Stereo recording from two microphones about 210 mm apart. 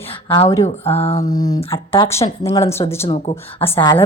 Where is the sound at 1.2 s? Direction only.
15° left (ahead or behind).